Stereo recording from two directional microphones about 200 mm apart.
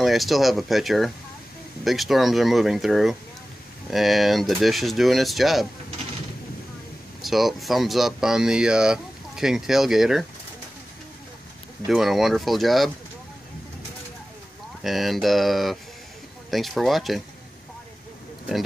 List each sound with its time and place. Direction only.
0.0 s speech: centre (ahead or behind)
7.2 s speech: centre (ahead or behind)
11.9 s speech: centre (ahead or behind)
14.8 s speech: centre (ahead or behind)